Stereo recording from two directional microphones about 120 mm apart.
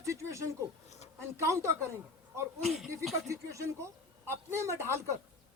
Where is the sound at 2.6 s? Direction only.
Centre (ahead or behind).